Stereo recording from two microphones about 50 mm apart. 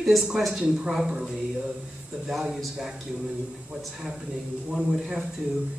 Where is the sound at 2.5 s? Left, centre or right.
Centre.